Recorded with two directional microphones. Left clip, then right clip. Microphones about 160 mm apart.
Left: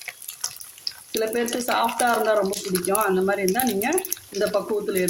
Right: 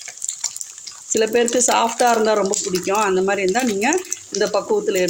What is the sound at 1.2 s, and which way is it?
Speech, 50° right (ahead or behind).